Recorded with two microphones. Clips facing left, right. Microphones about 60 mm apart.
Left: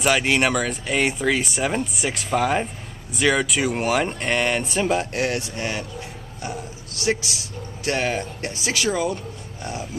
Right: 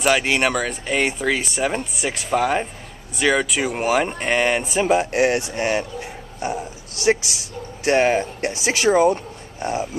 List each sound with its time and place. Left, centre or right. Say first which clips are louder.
0.0 s speech: right 1 dB; centre; by 5.9 s right
6.4 s a sound: right 6 dB; right
7.8 s speech: right 7 dB; right